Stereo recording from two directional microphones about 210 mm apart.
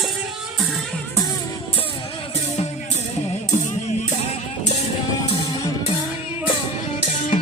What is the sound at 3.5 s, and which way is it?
Music, 35° left (ahead or behind).